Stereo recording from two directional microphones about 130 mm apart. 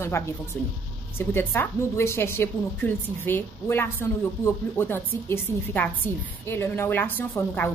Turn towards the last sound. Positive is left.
turn(degrees=15)  # may be behind; listen again after turning